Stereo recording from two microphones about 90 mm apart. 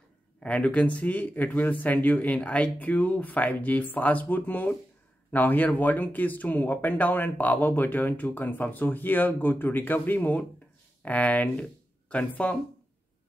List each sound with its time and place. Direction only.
0.4 s speech: 10° left (ahead or behind)